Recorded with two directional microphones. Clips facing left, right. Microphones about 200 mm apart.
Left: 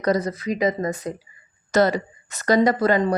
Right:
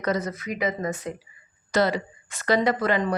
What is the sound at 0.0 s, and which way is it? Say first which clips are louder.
A woman's voice: left 5 dB; 35° left (ahead or behind).